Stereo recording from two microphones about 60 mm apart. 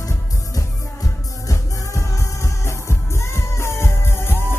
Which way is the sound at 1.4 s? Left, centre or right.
Left.